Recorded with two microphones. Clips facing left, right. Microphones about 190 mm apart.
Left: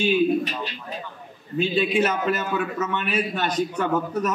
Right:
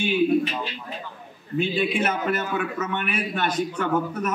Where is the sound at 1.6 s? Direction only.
55° right (ahead or behind).